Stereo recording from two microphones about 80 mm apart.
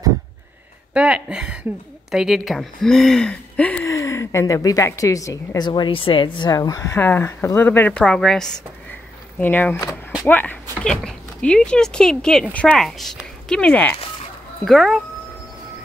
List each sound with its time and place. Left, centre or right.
0.9 s speech: centre
3.8 s a woman's voice: left
5.6 s a woman's voice: left
6.5 s speech: left
7.0 s speech: left
7.9 s a woman's voice: centre
9.4 s speech: left
10.8 s speech: centre
13.5 s a woman's voice: centre
14.6 s speech: centre